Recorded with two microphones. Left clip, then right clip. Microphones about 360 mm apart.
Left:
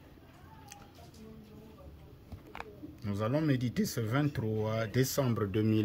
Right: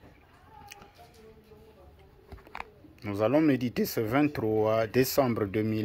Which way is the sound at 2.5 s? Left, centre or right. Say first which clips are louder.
Right 3 dB; centre.